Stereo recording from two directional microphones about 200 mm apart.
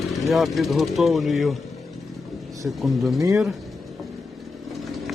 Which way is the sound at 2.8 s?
Centre (ahead or behind).